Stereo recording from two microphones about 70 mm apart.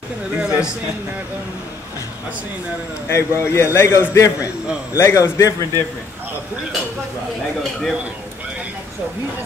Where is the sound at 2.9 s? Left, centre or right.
Left.